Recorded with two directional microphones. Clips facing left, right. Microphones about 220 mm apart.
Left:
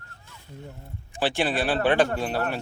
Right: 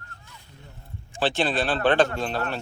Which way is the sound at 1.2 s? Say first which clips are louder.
Even; 10° left (ahead or behind).